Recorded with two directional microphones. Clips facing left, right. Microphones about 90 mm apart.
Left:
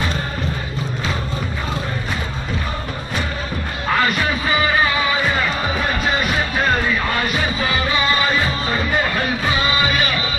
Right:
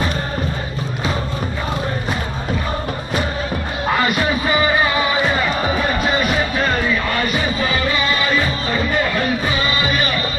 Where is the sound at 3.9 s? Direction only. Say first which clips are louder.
Even; 10° right (ahead or behind).